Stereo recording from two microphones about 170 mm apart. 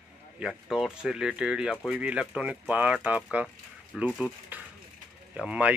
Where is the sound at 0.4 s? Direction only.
Centre (ahead or behind).